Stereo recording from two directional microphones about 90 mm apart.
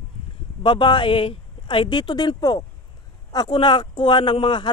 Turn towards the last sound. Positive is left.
turn(degrees=60)  # may be behind; listen again after turning